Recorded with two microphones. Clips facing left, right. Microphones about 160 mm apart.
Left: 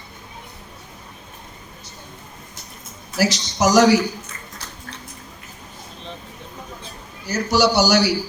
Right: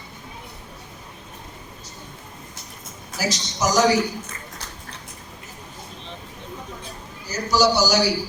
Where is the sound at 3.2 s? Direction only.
70° left (ahead or behind).